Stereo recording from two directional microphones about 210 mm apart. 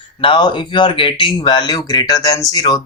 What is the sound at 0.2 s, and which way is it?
Speech, 25° left (ahead or behind).